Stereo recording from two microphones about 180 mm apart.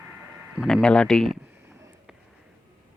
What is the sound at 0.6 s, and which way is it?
Speech, 5° left (ahead or behind).